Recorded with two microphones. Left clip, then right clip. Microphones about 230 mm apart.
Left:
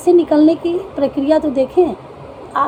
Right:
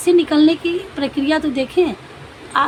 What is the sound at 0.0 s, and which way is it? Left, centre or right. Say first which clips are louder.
Speech: left 2 dB; right.